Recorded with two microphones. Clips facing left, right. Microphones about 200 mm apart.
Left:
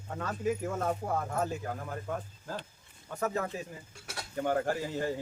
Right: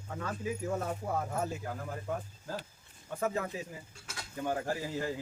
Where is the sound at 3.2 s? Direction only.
45° left (ahead or behind).